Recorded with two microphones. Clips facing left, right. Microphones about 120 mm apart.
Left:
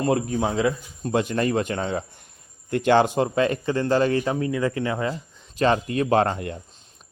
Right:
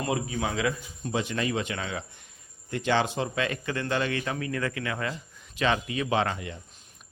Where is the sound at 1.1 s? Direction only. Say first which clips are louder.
Left 6 dB; 45° left (ahead or behind).